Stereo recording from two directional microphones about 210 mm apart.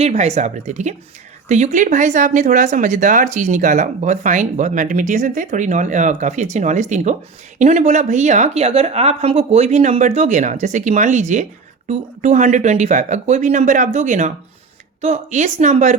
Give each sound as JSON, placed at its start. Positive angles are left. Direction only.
{"t": 0.0, "sound": "speech", "side_deg": -30}